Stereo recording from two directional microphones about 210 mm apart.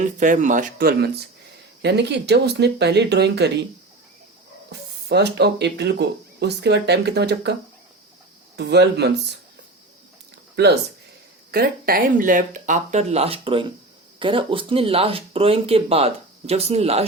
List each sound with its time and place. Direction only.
0.0 s speech: 35° right (ahead or behind); by 3.7 s 55° right (ahead or behind)
4.7 s speech: 50° right (ahead or behind)
8.5 s speech: 55° right (ahead or behind)
10.5 s speech: 55° right (ahead or behind); by 17.1 s 30° right (ahead or behind)